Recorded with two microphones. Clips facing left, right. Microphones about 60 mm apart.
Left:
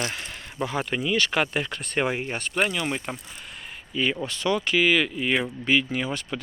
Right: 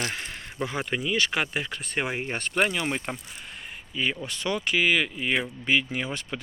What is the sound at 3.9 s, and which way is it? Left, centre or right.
Speech, centre.